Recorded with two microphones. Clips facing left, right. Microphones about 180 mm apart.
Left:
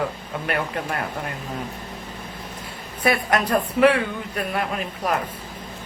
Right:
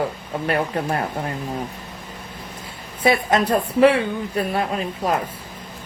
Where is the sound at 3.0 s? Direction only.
25° right (ahead or behind).